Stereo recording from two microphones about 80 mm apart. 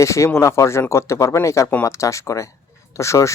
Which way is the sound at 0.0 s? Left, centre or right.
Left.